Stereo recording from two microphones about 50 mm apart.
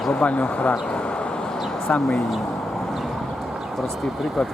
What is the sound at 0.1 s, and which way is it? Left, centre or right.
Speech, left.